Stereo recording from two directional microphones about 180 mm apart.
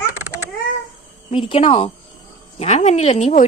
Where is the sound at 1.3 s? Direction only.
30° left (ahead or behind).